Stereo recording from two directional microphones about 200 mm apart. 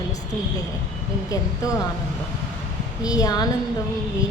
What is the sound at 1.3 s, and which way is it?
Speech, 15° left (ahead or behind).